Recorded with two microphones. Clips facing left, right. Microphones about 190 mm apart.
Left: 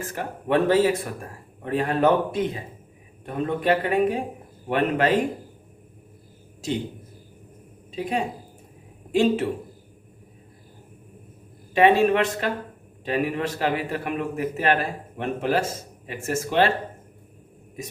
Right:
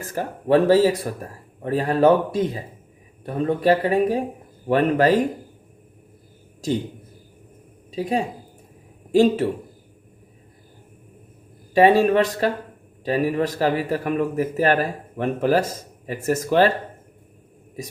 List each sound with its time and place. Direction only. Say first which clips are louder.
0.1 s a man's voice: right 6 dB; 35° right (ahead or behind)
7.9 s a man's voice: right 3 dB; 35° right (ahead or behind)
11.7 s a man's voice: right 3 dB; 40° right (ahead or behind)